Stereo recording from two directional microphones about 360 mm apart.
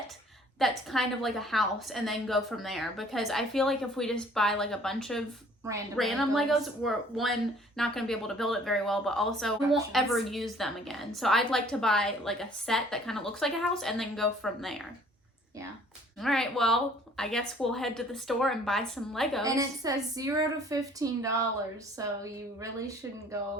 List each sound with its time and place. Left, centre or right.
0.6 s a woman's voice: centre
16.2 s a woman's voice: centre
19.5 s a woman's voice: centre